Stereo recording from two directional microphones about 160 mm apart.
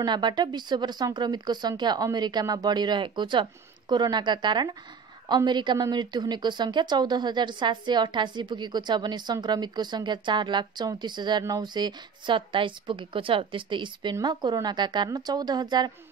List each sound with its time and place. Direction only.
0.0 s a woman's voice: 30° right (ahead or behind)